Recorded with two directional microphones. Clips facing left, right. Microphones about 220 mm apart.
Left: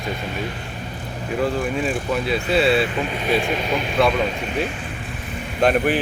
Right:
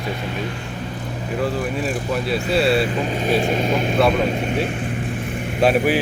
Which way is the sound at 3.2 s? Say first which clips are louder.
Right 3 dB; 45° right (ahead or behind).